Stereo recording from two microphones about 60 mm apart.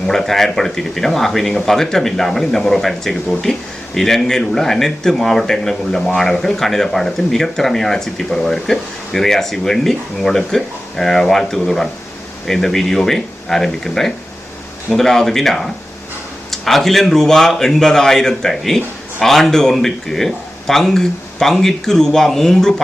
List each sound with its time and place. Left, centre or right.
0.1 s speech: centre